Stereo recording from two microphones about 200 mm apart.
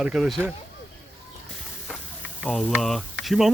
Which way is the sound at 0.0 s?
5° right (ahead or behind).